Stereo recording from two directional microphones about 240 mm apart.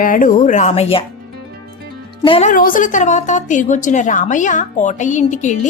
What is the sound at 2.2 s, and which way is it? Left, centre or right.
A woman's voice, left.